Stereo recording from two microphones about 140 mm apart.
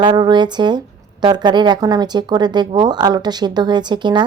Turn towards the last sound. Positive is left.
turn(degrees=-30)  # may be behind; listen again after turning